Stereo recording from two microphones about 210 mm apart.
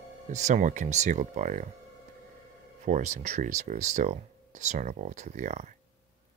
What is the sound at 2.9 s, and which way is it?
Speech, 35° right (ahead or behind).